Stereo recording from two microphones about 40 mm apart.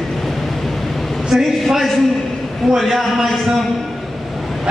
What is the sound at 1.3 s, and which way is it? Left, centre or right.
A man's voice, centre.